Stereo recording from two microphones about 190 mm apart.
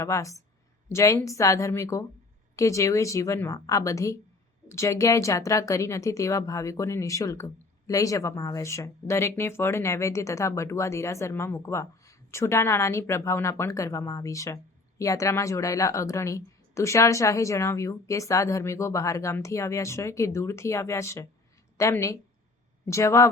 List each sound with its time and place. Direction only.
0.0 s speech: 15° left (ahead or behind)